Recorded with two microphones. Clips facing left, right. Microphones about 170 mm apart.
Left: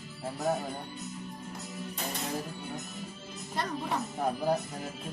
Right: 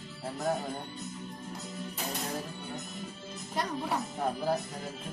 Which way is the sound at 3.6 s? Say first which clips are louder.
Right 1 dB; 10° right (ahead or behind).